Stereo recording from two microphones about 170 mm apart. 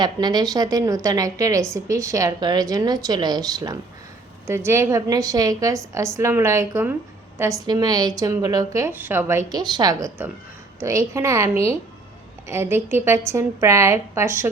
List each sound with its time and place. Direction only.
0.0 s a woman's voice: 25° right (ahead or behind)
9.5 s a woman's voice: 25° right (ahead or behind)